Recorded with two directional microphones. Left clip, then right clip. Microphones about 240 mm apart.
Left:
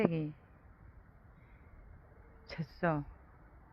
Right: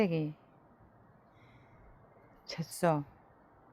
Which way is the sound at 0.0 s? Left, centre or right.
Centre.